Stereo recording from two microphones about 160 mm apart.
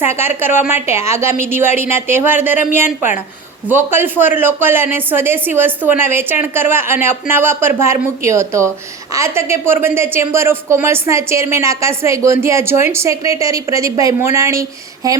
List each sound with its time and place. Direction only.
0.0 s a woman's voice: 15° right (ahead or behind)